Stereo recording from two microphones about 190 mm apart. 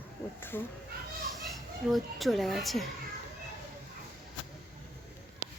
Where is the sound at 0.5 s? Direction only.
10° left (ahead or behind).